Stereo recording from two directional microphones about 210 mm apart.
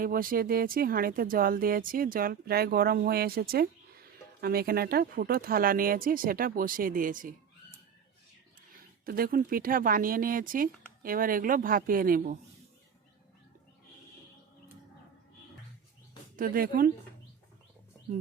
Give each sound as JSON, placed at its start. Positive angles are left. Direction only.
{"t": 0.0, "sound": "speech", "side_deg": -40}
{"t": 9.0, "sound": "speech", "side_deg": -45}
{"t": 16.3, "sound": "speech", "side_deg": -45}